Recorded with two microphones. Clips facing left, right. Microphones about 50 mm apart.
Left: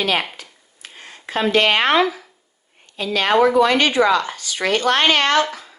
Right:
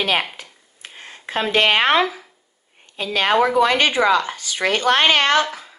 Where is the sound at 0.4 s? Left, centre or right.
Right.